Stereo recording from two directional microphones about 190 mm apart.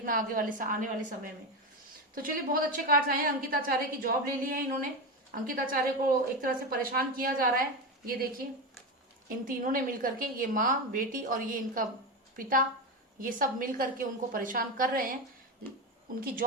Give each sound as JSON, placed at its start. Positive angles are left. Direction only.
{"t": 0.0, "sound": "a woman's voice", "side_deg": -45}
{"t": 9.5, "sound": "a woman's voice", "side_deg": -45}